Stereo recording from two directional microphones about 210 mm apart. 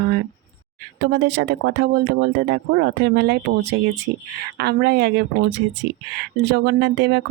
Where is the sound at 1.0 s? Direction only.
55° right (ahead or behind).